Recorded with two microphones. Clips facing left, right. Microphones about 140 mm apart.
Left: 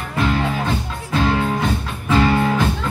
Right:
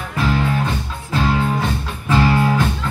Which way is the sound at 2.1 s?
Centre (ahead or behind).